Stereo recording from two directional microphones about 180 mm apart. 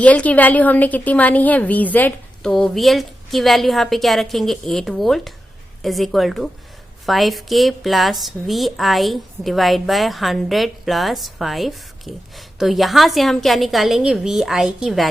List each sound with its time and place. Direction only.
0.0 s a woman's voice: 10° left (ahead or behind)